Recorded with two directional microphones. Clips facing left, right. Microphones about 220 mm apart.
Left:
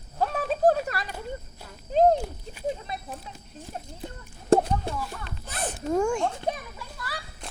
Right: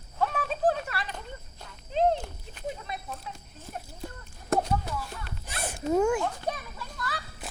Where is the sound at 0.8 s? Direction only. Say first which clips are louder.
Left 4 dB; 40° left (ahead or behind).